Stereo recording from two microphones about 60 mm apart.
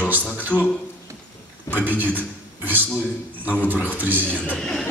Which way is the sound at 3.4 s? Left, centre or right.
Right.